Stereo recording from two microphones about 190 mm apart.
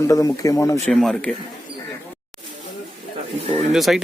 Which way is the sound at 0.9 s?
5° left (ahead or behind).